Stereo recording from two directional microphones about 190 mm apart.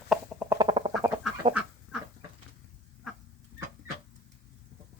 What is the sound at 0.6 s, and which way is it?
Duck, 30° right (ahead or behind).